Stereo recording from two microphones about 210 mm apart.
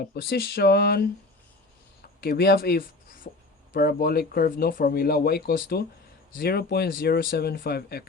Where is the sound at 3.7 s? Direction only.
45° left (ahead or behind).